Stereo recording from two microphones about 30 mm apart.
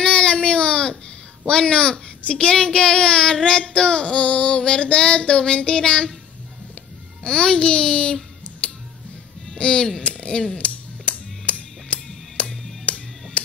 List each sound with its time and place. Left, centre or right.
0.0 s baby cry: left
1.5 s a child's voice: left
7.2 s a child's voice: left
9.6 s speech: left
10.6 s music: left